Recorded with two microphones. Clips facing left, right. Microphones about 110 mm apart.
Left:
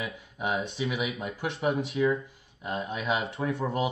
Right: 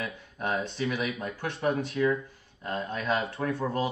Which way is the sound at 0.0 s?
10° left (ahead or behind).